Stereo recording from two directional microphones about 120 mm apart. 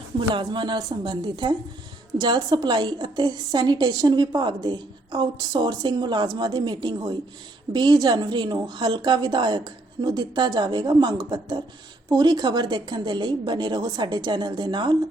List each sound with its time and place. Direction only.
0.3 s a woman's voice: 40° right (ahead or behind)